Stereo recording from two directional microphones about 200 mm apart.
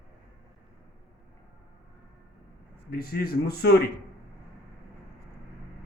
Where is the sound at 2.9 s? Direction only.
50° left (ahead or behind).